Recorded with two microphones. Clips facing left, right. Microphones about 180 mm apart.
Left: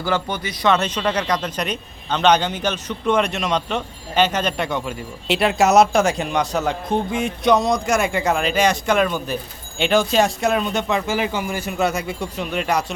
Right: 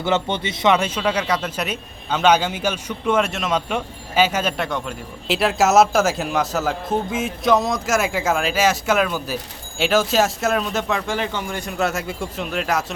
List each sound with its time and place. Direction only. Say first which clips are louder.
0.0 s speech: right 2 dB; 25° right (ahead or behind)
0.8 s a man's voice: even; 10° right (ahead or behind)